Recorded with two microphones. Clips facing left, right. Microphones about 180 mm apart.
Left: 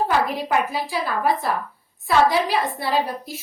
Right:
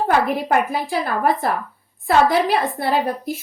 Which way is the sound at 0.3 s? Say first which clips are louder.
Right 3 dB; 55° right (ahead or behind).